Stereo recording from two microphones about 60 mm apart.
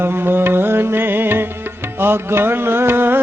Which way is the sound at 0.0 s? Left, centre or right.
Right.